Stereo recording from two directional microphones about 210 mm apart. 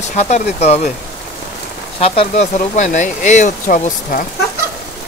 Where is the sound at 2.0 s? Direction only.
30° left (ahead or behind).